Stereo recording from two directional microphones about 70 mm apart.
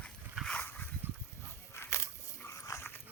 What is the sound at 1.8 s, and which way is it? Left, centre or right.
Biting, left.